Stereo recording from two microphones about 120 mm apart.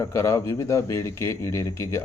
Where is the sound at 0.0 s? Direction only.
25° left (ahead or behind).